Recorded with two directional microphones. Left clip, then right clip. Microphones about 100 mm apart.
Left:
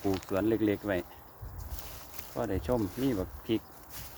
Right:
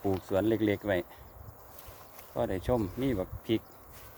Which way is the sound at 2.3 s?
60° right (ahead or behind).